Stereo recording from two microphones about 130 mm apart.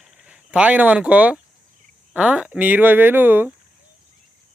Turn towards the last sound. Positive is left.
turn(degrees=-15)  # may be behind; listen again after turning